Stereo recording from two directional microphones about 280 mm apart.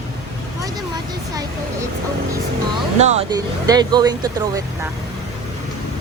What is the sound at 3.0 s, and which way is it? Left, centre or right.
Speech, right.